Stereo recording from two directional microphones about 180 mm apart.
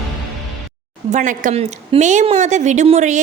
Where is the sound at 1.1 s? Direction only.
45° right (ahead or behind).